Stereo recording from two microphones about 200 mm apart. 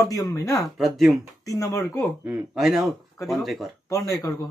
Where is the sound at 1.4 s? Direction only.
15° left (ahead or behind).